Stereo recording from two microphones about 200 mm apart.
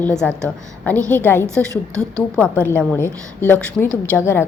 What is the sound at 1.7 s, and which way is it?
Speech, 15° right (ahead or behind).